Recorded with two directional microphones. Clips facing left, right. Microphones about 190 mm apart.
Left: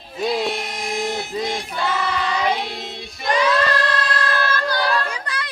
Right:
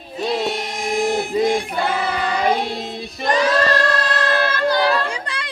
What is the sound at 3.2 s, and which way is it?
Choir, 40° right (ahead or behind).